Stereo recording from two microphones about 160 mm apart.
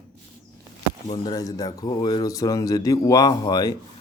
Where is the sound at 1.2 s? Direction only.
25° left (ahead or behind).